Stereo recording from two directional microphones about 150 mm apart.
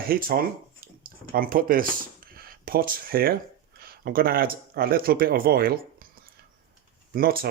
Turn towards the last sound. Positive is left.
turn(degrees=-75)  # may be behind; listen again after turning